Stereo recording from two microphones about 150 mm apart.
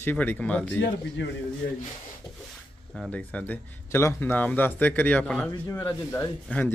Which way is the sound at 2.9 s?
5° left (ahead or behind).